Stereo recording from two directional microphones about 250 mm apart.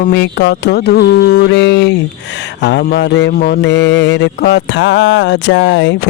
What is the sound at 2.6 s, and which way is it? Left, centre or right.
Mantra, left.